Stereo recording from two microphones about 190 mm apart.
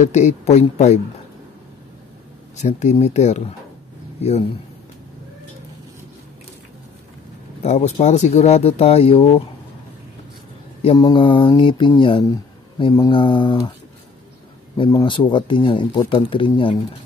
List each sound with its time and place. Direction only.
0.0 s speech: 40° left (ahead or behind)
2.5 s speech: 35° left (ahead or behind)
7.6 s speech: 35° left (ahead or behind)
10.8 s speech: 25° left (ahead or behind)
14.8 s speech: 25° left (ahead or behind)